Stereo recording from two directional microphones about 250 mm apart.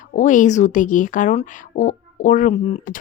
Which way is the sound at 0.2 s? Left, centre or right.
Left.